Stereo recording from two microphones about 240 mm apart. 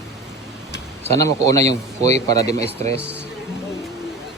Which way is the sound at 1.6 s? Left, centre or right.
Right.